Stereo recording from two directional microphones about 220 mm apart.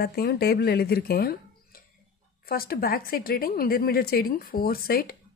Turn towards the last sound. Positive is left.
turn(degrees=45)  # may be behind; listen again after turning